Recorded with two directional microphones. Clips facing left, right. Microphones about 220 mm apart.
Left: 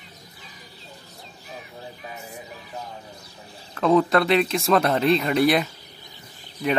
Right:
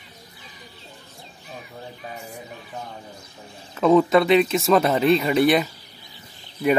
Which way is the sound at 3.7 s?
Centre (ahead or behind).